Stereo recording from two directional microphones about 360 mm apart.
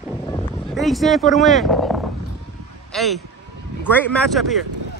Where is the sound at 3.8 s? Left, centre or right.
Centre.